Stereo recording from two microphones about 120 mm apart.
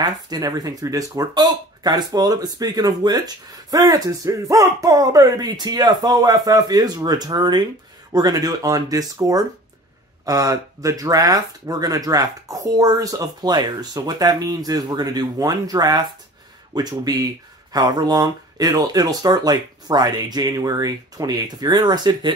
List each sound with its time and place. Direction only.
0.0 s speech: 30° right (ahead or behind)